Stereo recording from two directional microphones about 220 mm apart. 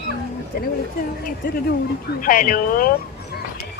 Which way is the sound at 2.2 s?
40° left (ahead or behind).